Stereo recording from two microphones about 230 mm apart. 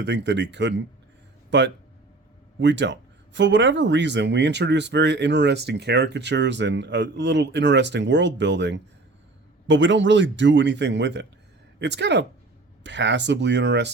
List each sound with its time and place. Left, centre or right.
0.0 s speech: right